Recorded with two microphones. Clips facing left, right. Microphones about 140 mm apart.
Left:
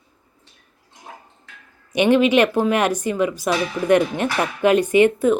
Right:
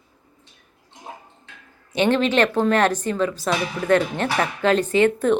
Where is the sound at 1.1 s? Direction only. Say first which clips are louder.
Right 2 dB; 20° right (ahead or behind).